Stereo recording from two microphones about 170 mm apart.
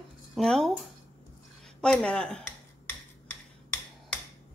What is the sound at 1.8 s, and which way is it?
Speech, 5° left (ahead or behind).